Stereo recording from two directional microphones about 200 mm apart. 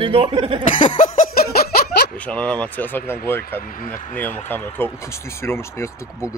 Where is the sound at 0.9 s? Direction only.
40° left (ahead or behind).